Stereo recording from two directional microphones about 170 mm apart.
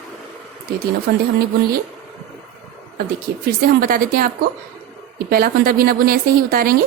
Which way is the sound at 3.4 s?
60° right (ahead or behind).